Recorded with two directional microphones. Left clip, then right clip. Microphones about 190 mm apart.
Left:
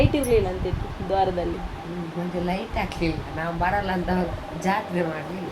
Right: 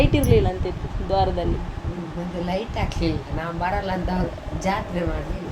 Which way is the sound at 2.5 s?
15° right (ahead or behind).